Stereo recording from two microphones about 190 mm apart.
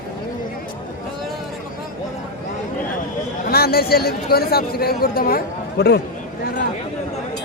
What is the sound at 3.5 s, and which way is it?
Speech, 55° left (ahead or behind).